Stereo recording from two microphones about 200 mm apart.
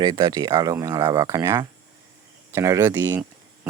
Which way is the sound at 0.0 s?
20° right (ahead or behind).